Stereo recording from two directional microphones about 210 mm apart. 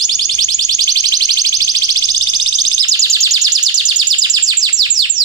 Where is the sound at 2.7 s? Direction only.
15° right (ahead or behind).